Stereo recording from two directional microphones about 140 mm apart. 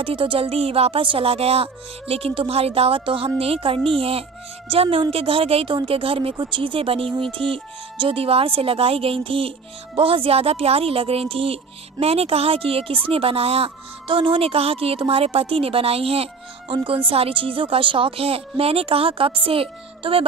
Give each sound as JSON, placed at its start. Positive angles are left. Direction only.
{"t": 0.0, "sound": "music", "side_deg": -40}
{"t": 3.3, "sound": "a woman's voice", "side_deg": -45}